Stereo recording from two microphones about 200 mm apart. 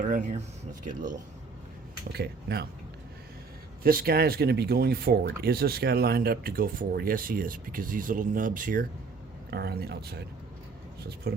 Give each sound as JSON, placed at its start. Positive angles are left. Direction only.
{"t": 0.0, "sound": "speech", "side_deg": -40}
{"t": 2.1, "sound": "speech", "side_deg": -55}
{"t": 3.8, "sound": "speech", "side_deg": -50}